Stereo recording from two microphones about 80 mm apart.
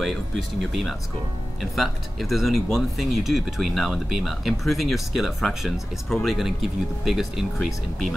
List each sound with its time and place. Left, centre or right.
0.0 s speech: centre